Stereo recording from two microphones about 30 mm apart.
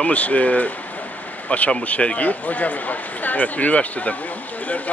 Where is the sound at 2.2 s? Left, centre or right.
Left.